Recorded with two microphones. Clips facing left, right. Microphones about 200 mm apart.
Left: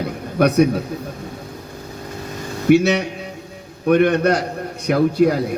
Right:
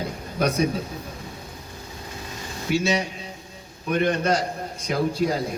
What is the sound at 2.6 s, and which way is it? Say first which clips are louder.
A man's voice: left 9 dB; 65° left (ahead or behind).